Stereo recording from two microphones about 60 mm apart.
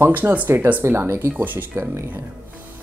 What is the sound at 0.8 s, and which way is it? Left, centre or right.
Speech, right.